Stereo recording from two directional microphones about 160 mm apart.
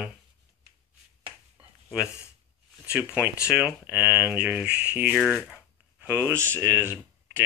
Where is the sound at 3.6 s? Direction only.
10° right (ahead or behind).